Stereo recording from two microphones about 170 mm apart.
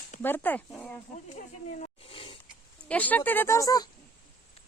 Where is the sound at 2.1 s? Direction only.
30° left (ahead or behind).